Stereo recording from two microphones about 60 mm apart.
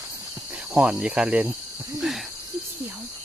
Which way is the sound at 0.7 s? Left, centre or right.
Centre.